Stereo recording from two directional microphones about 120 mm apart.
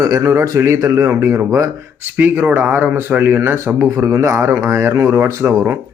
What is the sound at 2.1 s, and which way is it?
Speech, 15° right (ahead or behind).